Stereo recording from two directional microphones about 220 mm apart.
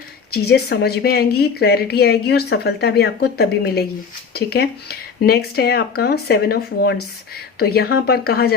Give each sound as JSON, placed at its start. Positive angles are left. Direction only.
{"t": 0.3, "sound": "speech", "side_deg": 45}